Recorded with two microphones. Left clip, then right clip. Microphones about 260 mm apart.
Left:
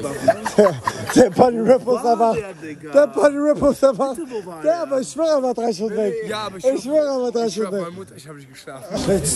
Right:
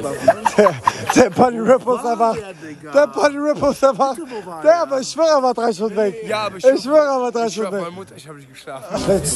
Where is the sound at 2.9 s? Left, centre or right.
Centre.